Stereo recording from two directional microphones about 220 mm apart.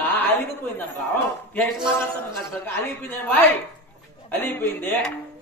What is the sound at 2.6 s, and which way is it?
A man's voice, 10° left (ahead or behind).